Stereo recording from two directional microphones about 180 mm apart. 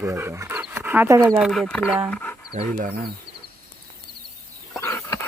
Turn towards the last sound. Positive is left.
turn(degrees=15)  # may be behind; listen again after turning